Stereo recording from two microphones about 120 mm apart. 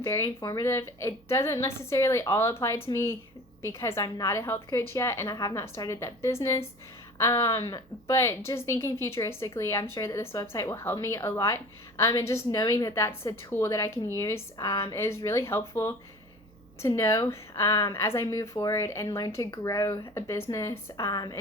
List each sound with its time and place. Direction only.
0.0 s speech: 25° left (ahead or behind)